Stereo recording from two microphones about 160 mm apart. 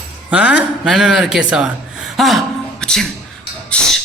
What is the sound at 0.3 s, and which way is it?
A man's voice, 10° right (ahead or behind).